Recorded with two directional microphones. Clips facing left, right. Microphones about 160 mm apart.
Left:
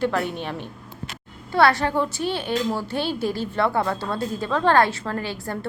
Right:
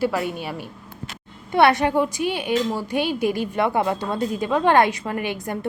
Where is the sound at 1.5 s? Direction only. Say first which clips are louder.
Right 2 dB; 20° right (ahead or behind).